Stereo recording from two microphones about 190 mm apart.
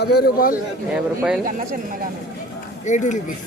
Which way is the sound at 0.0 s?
55° left (ahead or behind).